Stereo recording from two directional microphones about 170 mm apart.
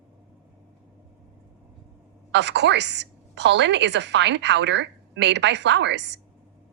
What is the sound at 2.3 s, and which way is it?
A woman's voice, 90° right.